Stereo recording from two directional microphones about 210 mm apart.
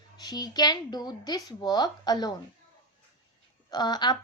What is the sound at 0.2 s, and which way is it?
A woman's voice, 20° left (ahead or behind).